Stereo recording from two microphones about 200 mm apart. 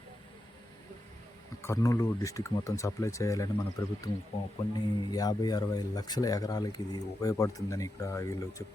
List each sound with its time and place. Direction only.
1.6 s speech: 15° left (ahead or behind)